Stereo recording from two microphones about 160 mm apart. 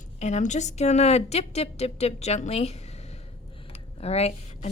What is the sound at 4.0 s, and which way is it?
Speech, 40° left (ahead or behind).